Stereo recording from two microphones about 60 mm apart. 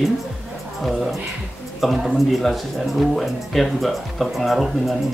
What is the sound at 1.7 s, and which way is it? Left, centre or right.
Speech, centre.